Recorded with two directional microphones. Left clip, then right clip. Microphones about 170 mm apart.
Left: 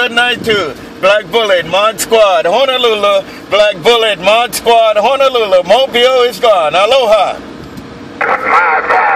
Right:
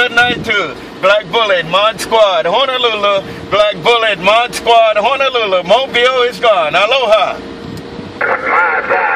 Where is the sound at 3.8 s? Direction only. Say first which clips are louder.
Left 2 dB; 35° left (ahead or behind).